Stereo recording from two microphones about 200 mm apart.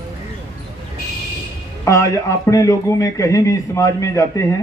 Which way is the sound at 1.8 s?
15° left (ahead or behind).